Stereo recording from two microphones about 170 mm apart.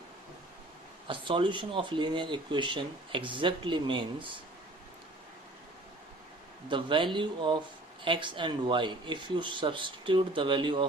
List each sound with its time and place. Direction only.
1.0 s speech: 30° right (ahead or behind)
6.7 s speech: 30° right (ahead or behind)